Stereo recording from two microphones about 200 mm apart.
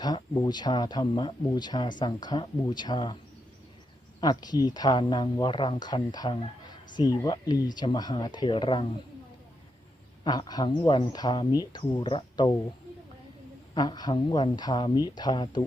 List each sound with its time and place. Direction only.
0.0 s speech: 20° left (ahead or behind)
4.2 s speech: 20° left (ahead or behind)
10.2 s speech: 20° left (ahead or behind)
13.7 s speech: 20° left (ahead or behind)